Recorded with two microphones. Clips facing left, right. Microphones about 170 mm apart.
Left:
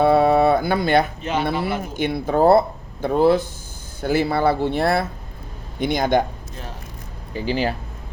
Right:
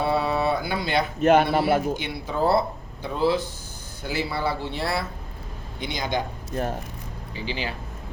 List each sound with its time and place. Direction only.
0.0 s a sound: 55° left (ahead or behind)
1.2 s speech: 55° right (ahead or behind)
2.0 s speech: 50° left (ahead or behind)
6.6 s speech: 50° right (ahead or behind)
7.3 s speech: 45° left (ahead or behind)